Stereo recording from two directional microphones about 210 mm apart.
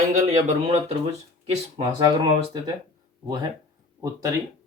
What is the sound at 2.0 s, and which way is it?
Speech, 20° right (ahead or behind).